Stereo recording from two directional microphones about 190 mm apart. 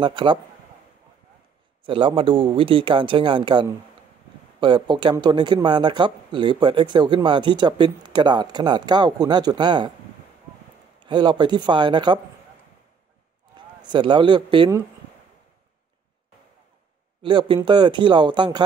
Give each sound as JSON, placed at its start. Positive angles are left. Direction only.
{"t": 0.0, "sound": "speech", "side_deg": -25}
{"t": 1.9, "sound": "speech", "side_deg": -25}
{"t": 11.0, "sound": "speech", "side_deg": -25}
{"t": 13.6, "sound": "a man's voice", "side_deg": -25}
{"t": 17.2, "sound": "a man's voice", "side_deg": -25}